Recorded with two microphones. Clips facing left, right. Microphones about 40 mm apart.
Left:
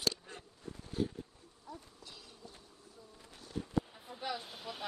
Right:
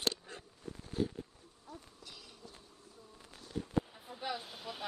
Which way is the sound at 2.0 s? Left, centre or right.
Right.